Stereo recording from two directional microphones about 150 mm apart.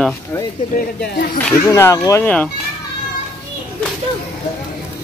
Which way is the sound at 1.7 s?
20° left (ahead or behind).